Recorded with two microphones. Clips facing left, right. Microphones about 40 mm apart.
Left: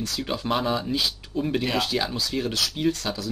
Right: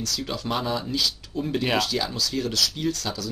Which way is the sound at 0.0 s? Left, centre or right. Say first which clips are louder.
Left 1 dB; centre.